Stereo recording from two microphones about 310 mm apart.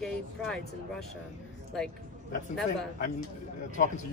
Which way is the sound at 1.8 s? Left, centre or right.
Centre.